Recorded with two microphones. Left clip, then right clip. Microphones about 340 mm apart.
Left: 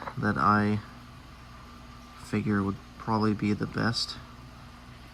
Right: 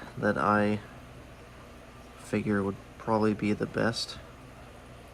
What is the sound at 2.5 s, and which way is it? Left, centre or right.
Speech, right.